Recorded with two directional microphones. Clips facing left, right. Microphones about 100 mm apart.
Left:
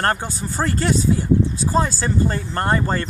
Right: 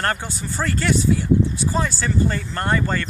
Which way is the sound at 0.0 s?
40° left (ahead or behind).